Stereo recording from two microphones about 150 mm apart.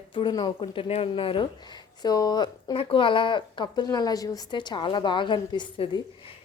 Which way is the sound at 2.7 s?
35° left (ahead or behind).